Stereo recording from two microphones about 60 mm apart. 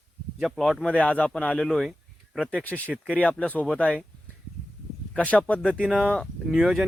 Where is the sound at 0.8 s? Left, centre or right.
Left.